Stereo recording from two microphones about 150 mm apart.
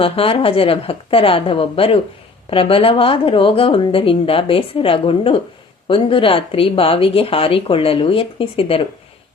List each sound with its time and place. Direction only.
0.0 s speech: 40° left (ahead or behind)